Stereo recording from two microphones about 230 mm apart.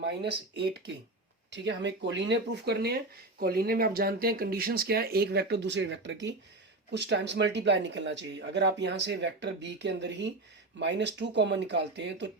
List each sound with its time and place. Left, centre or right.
0.0 s speech: right